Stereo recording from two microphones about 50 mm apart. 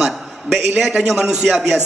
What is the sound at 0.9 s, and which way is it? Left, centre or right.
Speech, centre.